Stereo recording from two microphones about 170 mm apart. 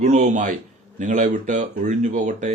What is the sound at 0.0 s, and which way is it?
Speech, 45° right (ahead or behind).